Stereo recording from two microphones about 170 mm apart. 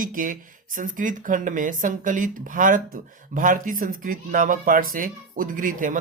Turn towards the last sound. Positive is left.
turn(degrees=-50)  # may be behind; listen again after turning